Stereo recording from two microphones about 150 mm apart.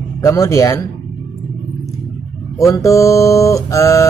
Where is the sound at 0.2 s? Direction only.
20° left (ahead or behind).